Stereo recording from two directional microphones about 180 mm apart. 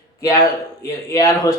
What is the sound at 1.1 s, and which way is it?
Speech, 20° left (ahead or behind).